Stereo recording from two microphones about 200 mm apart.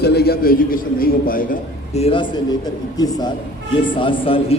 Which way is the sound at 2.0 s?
30° left (ahead or behind).